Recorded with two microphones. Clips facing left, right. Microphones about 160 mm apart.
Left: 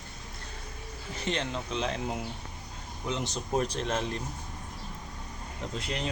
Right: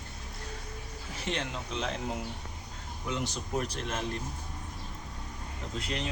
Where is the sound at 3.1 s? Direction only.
25° left (ahead or behind).